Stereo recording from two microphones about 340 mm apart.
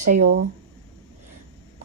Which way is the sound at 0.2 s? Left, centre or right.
Right.